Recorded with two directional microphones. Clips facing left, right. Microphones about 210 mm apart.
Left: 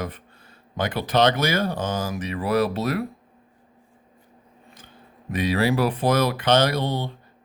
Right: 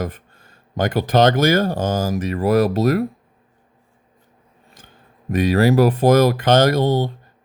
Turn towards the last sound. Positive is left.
turn(degrees=-45)  # may be behind; listen again after turning